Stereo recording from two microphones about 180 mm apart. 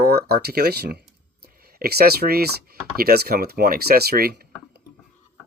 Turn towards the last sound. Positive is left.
turn(degrees=-60)  # may be behind; listen again after turning